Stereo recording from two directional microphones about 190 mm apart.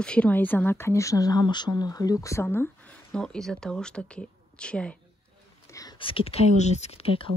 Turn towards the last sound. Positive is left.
turn(degrees=30)  # may be behind; listen again after turning